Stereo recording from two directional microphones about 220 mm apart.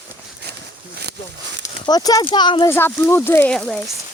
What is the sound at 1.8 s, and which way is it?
Speech, 15° left (ahead or behind).